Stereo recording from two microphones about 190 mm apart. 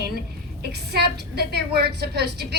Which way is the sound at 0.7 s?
60° right (ahead or behind).